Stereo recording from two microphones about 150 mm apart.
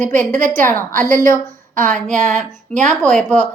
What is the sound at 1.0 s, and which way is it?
A woman's voice, 65° right (ahead or behind).